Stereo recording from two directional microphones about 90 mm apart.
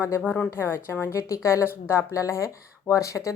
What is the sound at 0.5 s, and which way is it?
A woman's voice, 30° left (ahead or behind).